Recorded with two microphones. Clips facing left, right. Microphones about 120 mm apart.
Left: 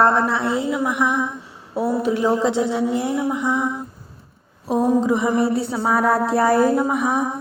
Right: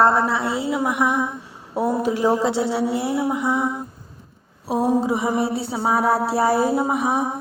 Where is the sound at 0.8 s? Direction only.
10° right (ahead or behind).